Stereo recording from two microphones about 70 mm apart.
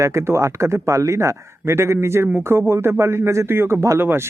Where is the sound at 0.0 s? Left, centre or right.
Right.